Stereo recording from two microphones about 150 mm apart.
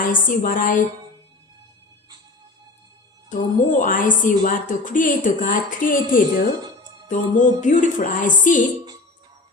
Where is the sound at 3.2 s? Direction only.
60° left (ahead or behind).